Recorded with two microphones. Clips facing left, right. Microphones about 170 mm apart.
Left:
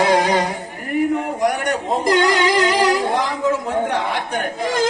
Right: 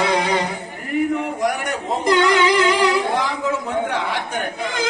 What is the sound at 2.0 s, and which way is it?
Singing, 40° left (ahead or behind).